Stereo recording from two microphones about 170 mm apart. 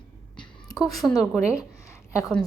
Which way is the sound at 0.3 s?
20° left (ahead or behind).